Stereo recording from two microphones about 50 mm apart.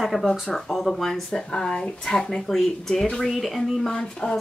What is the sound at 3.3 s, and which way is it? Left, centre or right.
Speech, centre.